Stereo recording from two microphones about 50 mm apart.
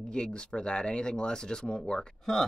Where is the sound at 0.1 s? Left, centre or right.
Centre.